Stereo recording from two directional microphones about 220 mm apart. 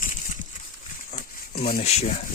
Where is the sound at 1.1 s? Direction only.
40° left (ahead or behind).